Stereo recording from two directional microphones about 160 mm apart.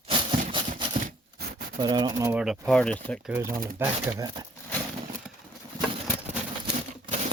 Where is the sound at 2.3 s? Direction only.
5° right (ahead or behind).